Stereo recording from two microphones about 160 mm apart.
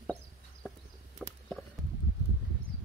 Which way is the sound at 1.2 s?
5° left (ahead or behind).